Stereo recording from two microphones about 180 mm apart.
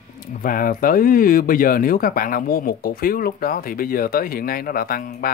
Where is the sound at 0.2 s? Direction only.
50° left (ahead or behind).